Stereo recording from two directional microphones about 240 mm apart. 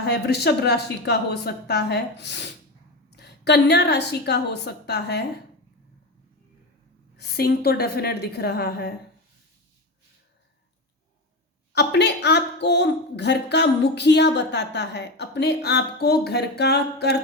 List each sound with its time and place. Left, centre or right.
0.0 s speech: left
7.2 s a woman's voice: left
11.7 s speech: left